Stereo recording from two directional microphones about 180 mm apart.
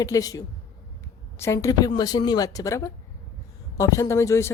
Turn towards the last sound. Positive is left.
turn(degrees=15)  # may be behind; listen again after turning